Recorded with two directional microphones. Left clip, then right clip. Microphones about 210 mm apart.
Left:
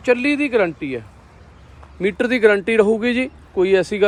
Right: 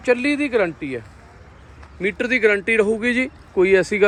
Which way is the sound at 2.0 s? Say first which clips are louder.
Left 2 dB; 10° left (ahead or behind).